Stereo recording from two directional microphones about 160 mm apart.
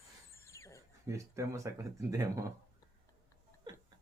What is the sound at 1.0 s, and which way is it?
Speech, 20° right (ahead or behind).